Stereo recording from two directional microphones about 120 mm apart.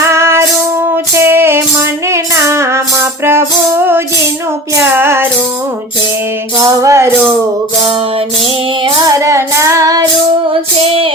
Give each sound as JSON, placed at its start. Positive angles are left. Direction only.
{"t": 0.0, "sound": "music", "side_deg": -20}
{"t": 6.6, "sound": "music", "side_deg": -25}
{"t": 9.0, "sound": "music", "side_deg": -25}